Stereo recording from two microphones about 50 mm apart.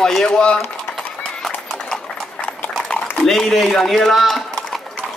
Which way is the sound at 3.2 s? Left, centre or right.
Centre.